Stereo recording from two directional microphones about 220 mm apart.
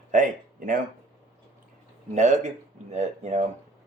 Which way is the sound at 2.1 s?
30° right (ahead or behind).